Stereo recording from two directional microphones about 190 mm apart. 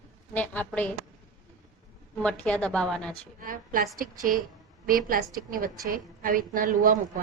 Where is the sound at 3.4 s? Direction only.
45° right (ahead or behind).